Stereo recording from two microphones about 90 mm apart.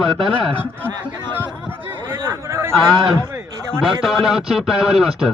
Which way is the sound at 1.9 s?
25° right (ahead or behind).